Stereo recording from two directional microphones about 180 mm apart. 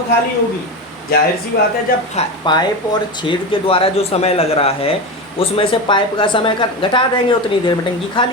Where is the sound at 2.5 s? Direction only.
25° left (ahead or behind).